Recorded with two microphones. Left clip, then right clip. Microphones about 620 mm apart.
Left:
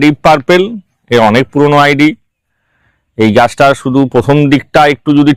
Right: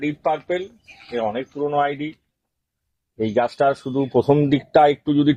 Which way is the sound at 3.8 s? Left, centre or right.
Left.